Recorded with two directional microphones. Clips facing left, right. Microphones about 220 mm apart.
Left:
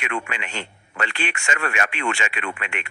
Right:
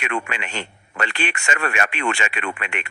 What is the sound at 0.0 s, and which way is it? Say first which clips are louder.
Speech: right 2 dB; 55° right (ahead or behind).